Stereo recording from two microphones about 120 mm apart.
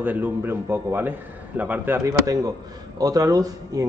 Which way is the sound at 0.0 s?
15° right (ahead or behind).